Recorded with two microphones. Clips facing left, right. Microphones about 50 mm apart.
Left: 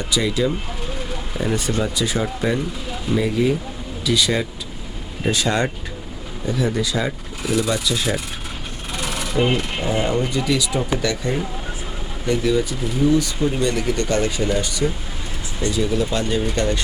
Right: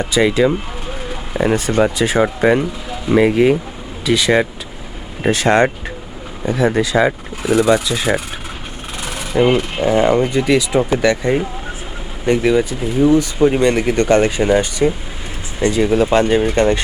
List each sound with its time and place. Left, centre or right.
0.0 s speech: right
9.3 s speech: right
9.8 s speech: right